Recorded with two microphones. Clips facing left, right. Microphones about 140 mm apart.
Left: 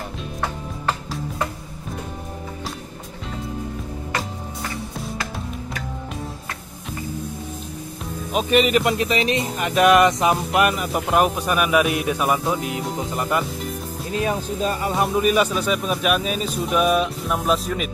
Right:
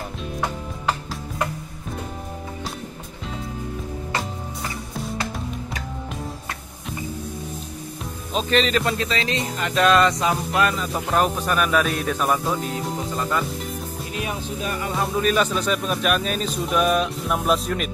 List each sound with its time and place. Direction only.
8.3 s speech: 10° left (ahead or behind)
12.9 s speech: 20° left (ahead or behind)
13.5 s music: centre (ahead or behind)
14.2 s speech: 30° left (ahead or behind)
15.2 s speech: 10° left (ahead or behind)